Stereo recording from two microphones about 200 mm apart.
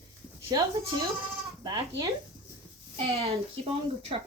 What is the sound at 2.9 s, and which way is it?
Speech, 30° right (ahead or behind).